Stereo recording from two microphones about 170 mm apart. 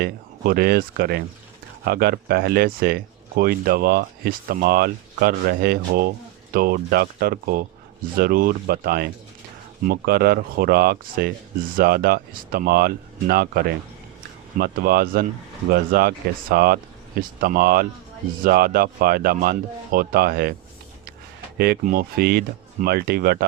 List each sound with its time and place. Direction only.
0.0 s speech: 65° right (ahead or behind)
21.6 s speech: 60° right (ahead or behind)